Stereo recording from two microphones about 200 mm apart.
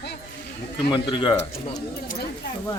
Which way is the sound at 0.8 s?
25° left (ahead or behind).